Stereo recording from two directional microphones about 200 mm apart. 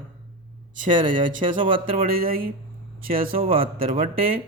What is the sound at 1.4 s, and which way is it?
Speech, 25° right (ahead or behind).